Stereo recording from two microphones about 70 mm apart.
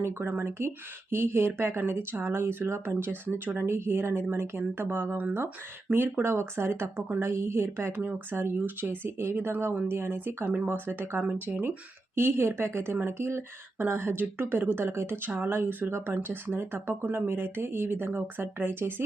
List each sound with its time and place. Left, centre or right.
0.0 s a woman's voice: right
12.1 s a woman's voice: right